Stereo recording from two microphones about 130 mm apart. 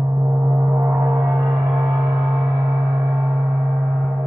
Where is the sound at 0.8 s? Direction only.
20° right (ahead or behind).